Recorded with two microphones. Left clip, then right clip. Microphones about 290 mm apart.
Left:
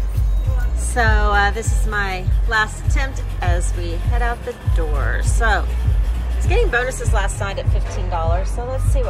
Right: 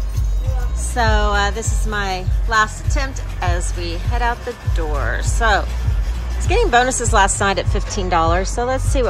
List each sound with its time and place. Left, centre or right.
0.9 s speech: centre; by 8.4 s right